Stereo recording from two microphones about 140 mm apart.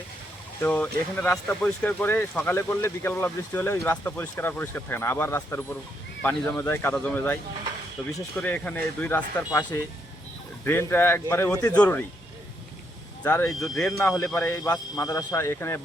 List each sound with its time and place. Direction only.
0.6 s speech: 10° left (ahead or behind)
10.7 s speech: 15° left (ahead or behind)
11.7 s speech: 10° left (ahead or behind)
13.2 s speech: 10° left (ahead or behind)
14.3 s speech: 15° left (ahead or behind)
14.9 s speech: 25° left (ahead or behind)